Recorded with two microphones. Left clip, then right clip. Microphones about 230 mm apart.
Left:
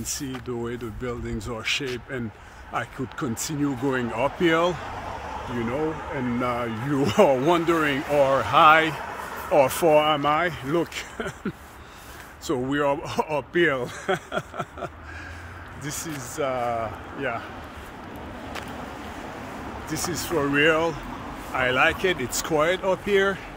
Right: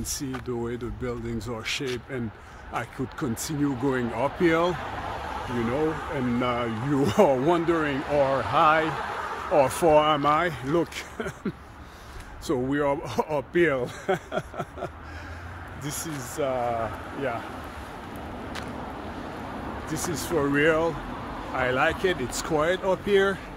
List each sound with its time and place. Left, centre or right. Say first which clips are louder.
0.0 s speech: left 1 dB; centre
5.6 s speech: right 1 dB; centre; by 8.9 s left
9.5 s speech: left 2 dB; centre
19.9 s speech: left 1 dB; centre